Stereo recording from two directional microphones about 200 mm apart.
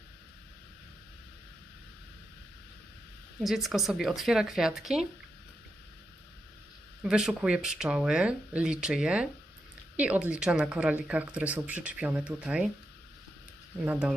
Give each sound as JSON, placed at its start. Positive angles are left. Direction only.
{"t": 3.4, "sound": "speech", "side_deg": 0}
{"t": 7.0, "sound": "speech", "side_deg": -5}
{"t": 13.8, "sound": "speech", "side_deg": -10}